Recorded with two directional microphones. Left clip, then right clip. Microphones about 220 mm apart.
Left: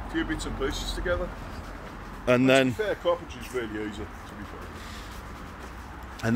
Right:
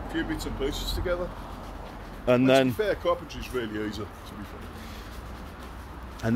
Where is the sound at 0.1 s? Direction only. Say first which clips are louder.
Left 1 dB; 15° right (ahead or behind).